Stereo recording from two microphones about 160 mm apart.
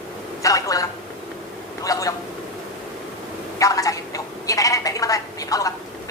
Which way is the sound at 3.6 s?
20° left (ahead or behind).